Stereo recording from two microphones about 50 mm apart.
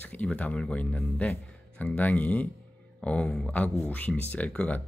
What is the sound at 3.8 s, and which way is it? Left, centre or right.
Speech, left.